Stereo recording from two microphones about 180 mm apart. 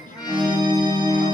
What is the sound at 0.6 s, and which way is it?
Music, 25° right (ahead or behind).